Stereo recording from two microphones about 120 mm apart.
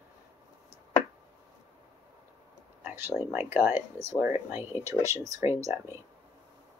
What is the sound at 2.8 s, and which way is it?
Speech, 15° right (ahead or behind).